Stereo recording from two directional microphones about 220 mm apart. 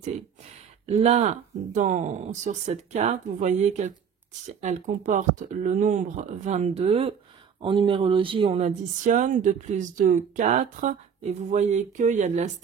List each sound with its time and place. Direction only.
0.0 s speech: 30° right (ahead or behind)